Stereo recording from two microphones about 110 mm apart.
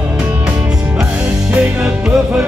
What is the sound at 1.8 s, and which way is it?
Music, 10° right (ahead or behind).